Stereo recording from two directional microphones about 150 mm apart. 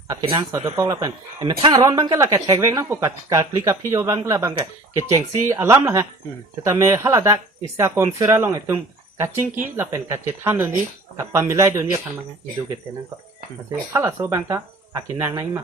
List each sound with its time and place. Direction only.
0.1 s speech: 25° right (ahead or behind)
13.7 s speech: 15° right (ahead or behind)